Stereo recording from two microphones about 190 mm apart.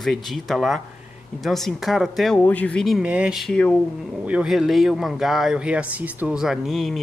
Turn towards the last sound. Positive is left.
turn(degrees=0)  # may be behind; listen again after turning